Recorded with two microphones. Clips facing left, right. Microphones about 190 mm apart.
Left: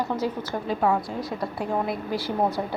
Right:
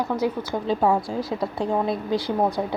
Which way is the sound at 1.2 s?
Centre (ahead or behind).